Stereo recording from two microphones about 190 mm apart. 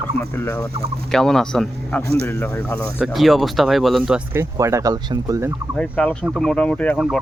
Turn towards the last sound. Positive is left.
turn(degrees=10)  # may be behind; listen again after turning